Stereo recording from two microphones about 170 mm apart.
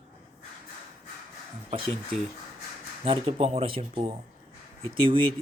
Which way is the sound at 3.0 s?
35° right (ahead or behind).